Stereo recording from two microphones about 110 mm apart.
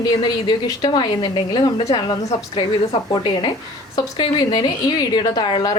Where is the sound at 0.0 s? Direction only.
40° left (ahead or behind).